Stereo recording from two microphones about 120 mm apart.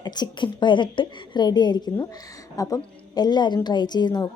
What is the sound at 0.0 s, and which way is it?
A woman's voice, 35° left (ahead or behind).